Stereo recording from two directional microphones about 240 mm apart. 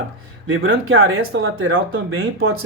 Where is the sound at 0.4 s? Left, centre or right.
Right.